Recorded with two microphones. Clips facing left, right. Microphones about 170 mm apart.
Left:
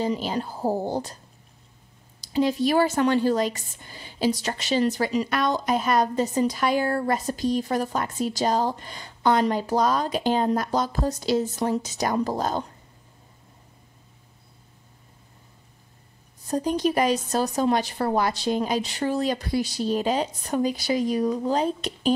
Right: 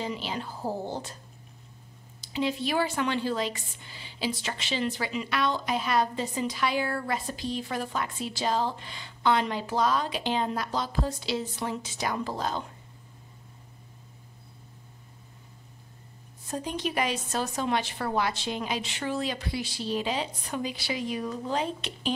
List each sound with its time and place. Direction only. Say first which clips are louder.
0.0 s a woman's voice: left 7 dB; 40° left (ahead or behind)
2.2 s speech: left 7 dB; 40° left (ahead or behind)
16.4 s a woman's voice: left 8 dB; 40° left (ahead or behind)